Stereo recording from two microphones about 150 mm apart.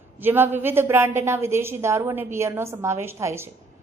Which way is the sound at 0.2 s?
15° right (ahead or behind).